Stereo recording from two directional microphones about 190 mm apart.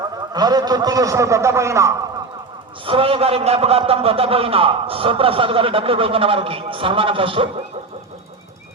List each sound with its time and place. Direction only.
0.0 s a man's voice: 20° right (ahead or behind)
2.8 s a man's voice: 30° right (ahead or behind)